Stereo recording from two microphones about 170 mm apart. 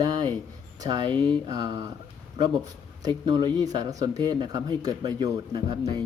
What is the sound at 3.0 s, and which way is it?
Speech, 25° right (ahead or behind).